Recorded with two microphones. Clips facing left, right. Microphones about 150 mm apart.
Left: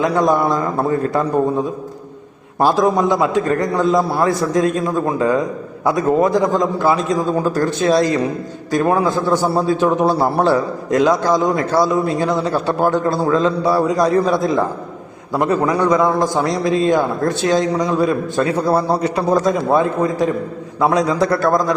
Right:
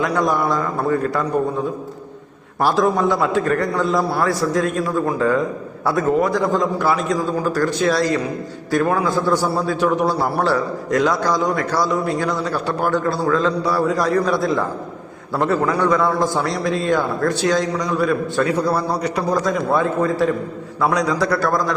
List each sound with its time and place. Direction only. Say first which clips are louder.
0.0 s a man's voice: left 4 dB; 20° left (ahead or behind)
2.6 s a man's voice: left 3 dB; 20° left (ahead or behind)